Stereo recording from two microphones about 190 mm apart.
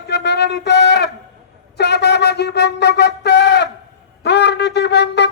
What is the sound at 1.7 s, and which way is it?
Wind instrument, 60° left (ahead or behind).